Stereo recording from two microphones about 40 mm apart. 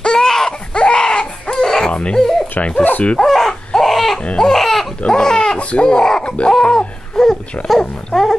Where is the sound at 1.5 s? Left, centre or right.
Centre.